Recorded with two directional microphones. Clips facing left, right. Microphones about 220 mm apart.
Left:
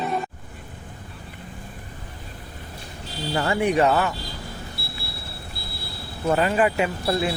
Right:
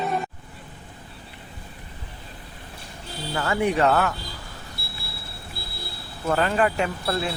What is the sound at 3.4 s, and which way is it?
Speech, 20° left (ahead or behind).